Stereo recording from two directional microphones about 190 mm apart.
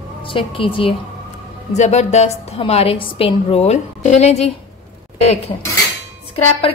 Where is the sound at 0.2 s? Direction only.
25° left (ahead or behind).